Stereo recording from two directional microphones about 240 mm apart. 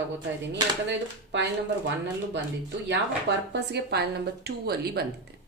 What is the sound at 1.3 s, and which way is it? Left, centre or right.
Speech, right.